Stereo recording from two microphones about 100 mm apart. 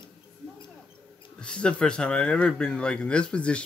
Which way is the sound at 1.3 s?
10° left (ahead or behind).